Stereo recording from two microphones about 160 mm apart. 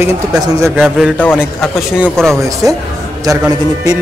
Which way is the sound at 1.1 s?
10° left (ahead or behind).